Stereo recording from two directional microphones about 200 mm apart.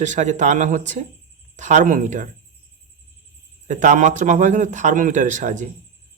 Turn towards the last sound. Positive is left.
turn(degrees=-40)  # may be behind; listen again after turning